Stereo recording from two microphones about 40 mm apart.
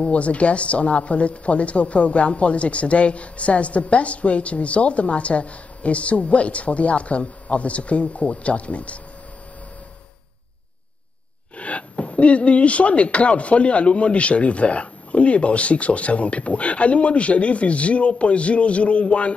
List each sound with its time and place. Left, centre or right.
0.0 s speech: left
11.5 s speech: left